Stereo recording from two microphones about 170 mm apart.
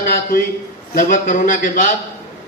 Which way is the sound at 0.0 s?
55° left (ahead or behind).